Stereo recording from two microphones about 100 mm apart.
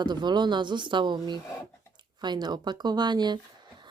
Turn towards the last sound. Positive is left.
turn(degrees=-50)  # may be behind; listen again after turning